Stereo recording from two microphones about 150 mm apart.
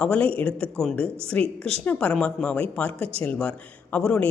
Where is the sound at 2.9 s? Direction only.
40° right (ahead or behind).